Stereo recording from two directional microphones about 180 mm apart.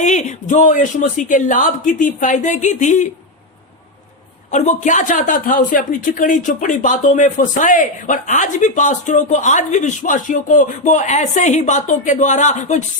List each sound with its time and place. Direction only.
0.0 s speech: 40° left (ahead or behind)
4.5 s speech: 40° left (ahead or behind)